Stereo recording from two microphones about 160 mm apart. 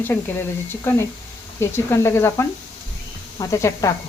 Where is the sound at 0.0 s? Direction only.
15° left (ahead or behind).